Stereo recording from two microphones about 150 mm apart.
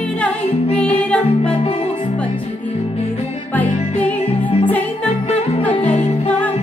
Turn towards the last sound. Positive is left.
turn(degrees=45)  # may be behind; listen again after turning